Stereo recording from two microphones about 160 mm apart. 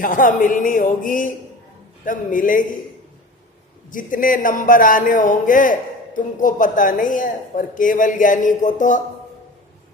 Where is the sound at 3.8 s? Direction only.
55° left (ahead or behind).